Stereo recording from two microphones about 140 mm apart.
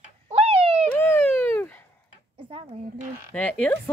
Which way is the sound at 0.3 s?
45° right (ahead or behind).